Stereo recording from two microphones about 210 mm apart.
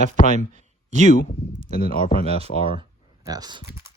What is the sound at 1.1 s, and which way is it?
Speech, 40° left (ahead or behind).